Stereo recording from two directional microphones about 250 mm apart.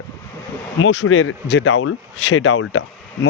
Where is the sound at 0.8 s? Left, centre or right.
Left.